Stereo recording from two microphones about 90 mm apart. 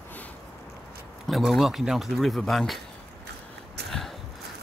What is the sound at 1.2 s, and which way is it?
Speech, centre (ahead or behind).